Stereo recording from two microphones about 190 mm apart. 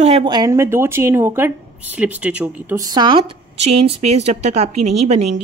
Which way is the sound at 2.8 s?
20° right (ahead or behind).